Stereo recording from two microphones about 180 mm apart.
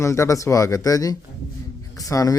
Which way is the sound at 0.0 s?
15° left (ahead or behind).